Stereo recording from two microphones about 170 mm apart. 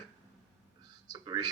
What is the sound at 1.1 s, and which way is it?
Speech, 25° right (ahead or behind).